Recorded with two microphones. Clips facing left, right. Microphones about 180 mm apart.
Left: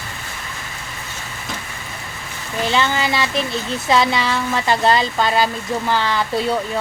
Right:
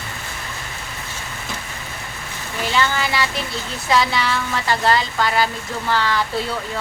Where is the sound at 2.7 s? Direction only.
20° left (ahead or behind).